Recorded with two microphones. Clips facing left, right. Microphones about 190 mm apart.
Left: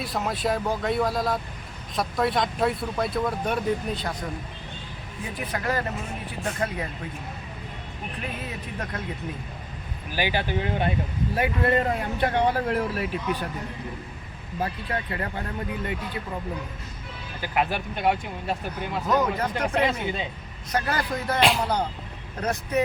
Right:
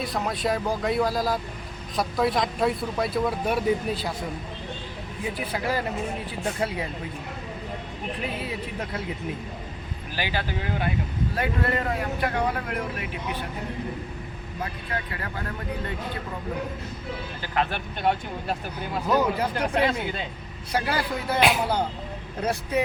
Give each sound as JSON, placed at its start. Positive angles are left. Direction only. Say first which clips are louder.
{"t": 0.0, "sound": "speech", "louder": "even", "side_deg": 0}
{"t": 5.5, "sound": "speech", "louder": "left 1 dB", "side_deg": -10}
{"t": 10.2, "sound": "speech", "louder": "left 4 dB", "side_deg": 20}
{"t": 17.4, "sound": "speech", "louder": "left 2 dB", "side_deg": 10}